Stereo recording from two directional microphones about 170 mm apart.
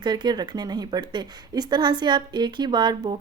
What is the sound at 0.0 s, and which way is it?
Speech, 25° right (ahead or behind).